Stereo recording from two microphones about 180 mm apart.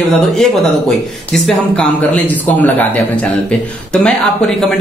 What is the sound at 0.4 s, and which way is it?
Speech, centre (ahead or behind).